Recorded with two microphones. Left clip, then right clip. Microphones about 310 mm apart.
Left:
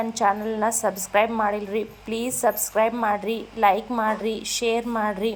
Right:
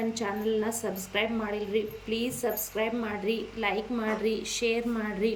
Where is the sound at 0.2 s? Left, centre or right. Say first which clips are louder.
Left 10 dB; left.